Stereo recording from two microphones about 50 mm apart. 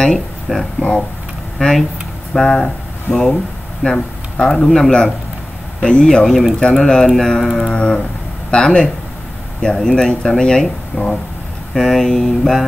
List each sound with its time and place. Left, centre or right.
0.0 s speech: centre
3.8 s speech: centre
5.8 s speech: centre
6.2 s speech: centre